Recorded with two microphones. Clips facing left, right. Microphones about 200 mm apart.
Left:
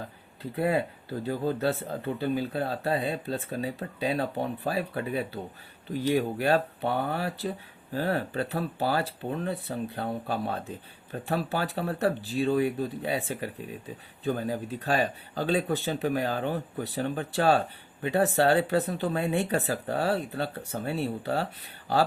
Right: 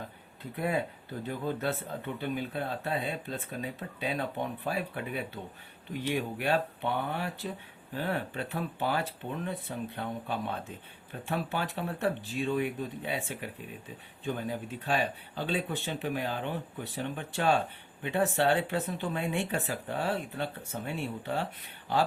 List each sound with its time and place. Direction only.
0.5 s speech: 35° left (ahead or behind)